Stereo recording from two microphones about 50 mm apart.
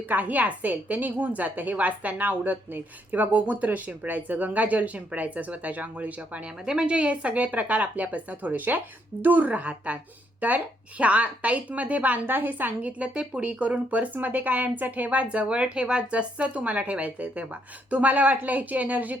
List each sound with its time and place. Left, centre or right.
0.1 s a woman's voice: right
12.2 s a woman's voice: right
13.0 s speech: right